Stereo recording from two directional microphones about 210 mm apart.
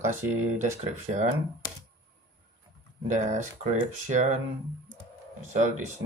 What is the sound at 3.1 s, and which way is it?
Speech, 35° right (ahead or behind).